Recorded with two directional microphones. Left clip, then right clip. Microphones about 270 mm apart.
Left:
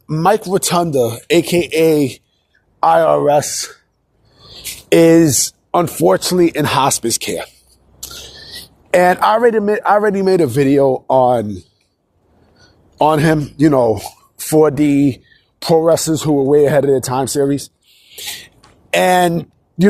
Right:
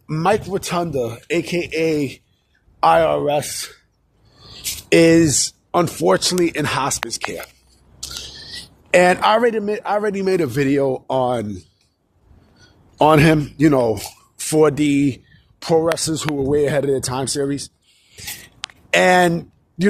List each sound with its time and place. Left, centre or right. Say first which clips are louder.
0.3 s speech: left 5 dB; left
12.5 s speech: left 2 dB; centre